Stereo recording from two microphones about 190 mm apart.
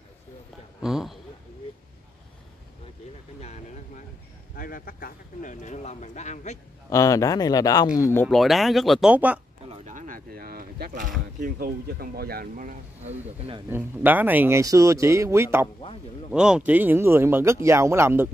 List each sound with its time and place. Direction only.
0.8 s a sound: centre (ahead or behind)
3.3 s vehicle: 35° left (ahead or behind)
4.6 s speech: 50° left (ahead or behind)
6.9 s speech: 15° left (ahead or behind)
8.4 s speech: centre (ahead or behind)
9.8 s a sound: 45° right (ahead or behind)
11.4 s speech: 50° right (ahead or behind)
13.7 s speech: 10° right (ahead or behind)